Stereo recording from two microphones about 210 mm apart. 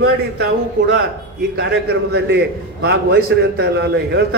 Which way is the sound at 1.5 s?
50° right (ahead or behind).